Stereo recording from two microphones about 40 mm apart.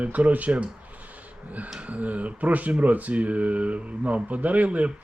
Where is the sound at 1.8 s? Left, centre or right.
Right.